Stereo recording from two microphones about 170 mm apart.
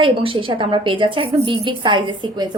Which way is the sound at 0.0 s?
30° right (ahead or behind).